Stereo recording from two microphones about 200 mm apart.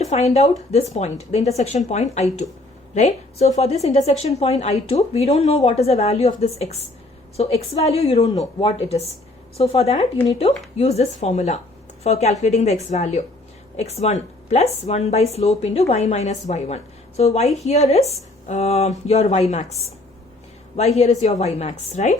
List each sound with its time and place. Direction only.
0.0 s a woman's voice: 35° left (ahead or behind)
20.7 s a woman's voice: 30° left (ahead or behind)